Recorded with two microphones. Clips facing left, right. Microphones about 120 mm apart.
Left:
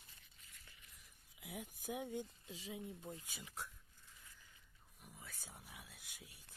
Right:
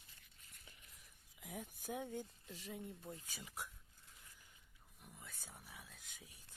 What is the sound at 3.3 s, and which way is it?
Speech, centre (ahead or behind).